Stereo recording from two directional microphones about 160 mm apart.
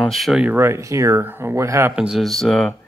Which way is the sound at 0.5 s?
15° right (ahead or behind).